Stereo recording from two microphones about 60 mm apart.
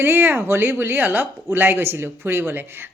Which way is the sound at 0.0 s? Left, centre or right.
Right.